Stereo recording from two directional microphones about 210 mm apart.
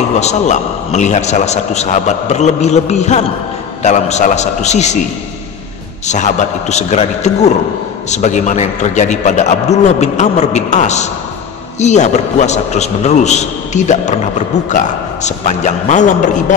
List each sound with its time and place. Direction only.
0.2 s a man's voice: 35° left (ahead or behind)
6.0 s a man's voice: 35° left (ahead or behind)
15.2 s a man's voice: 35° left (ahead or behind)